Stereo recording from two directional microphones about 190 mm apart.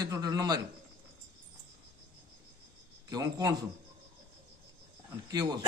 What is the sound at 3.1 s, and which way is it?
Speech, 20° right (ahead or behind).